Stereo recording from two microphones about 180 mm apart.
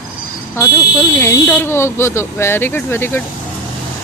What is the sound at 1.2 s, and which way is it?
Speech, 10° left (ahead or behind).